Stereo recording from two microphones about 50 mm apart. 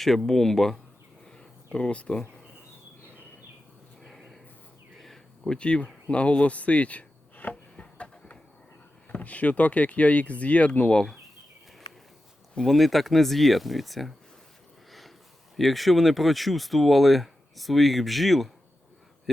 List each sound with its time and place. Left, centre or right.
0.0 s speech: centre
1.4 s a sound: centre
4.0 s a sound: centre
5.5 s speech: left
6.1 s chopping: left
7.5 s a sound: left
9.0 s speech: left
12.6 s speech: centre
15.5 s speech: centre